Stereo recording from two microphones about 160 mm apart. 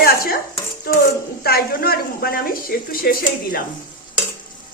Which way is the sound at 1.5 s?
70° left (ahead or behind).